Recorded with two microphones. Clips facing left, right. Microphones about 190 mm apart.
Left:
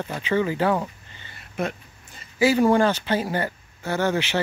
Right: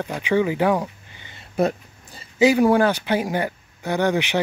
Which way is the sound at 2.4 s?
15° right (ahead or behind).